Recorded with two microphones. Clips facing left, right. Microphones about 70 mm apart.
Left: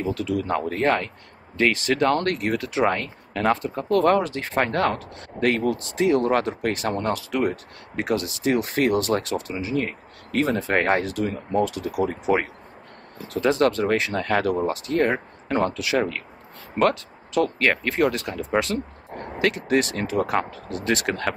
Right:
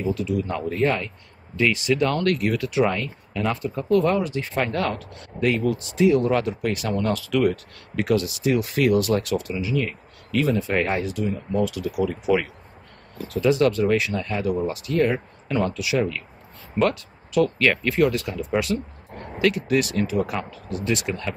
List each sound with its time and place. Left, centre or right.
0.0 s speech: left
7.2 s speech: left
14.2 s speech: left
14.6 s speech: left